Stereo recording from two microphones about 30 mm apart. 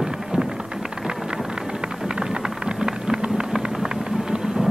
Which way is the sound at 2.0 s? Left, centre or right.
Right.